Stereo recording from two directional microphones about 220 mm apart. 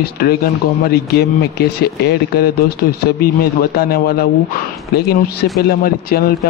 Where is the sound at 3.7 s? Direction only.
45° left (ahead or behind).